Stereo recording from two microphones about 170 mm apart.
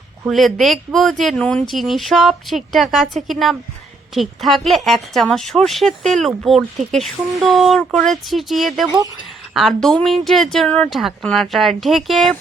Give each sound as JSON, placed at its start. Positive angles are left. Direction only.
{"t": 0.3, "sound": "a woman's voice", "side_deg": 0}